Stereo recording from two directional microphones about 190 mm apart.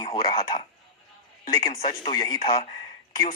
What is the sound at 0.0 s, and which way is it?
Speech, 25° left (ahead or behind).